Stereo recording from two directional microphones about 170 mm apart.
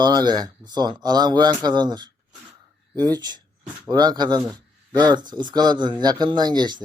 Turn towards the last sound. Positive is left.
turn(degrees=-25)  # may be behind; listen again after turning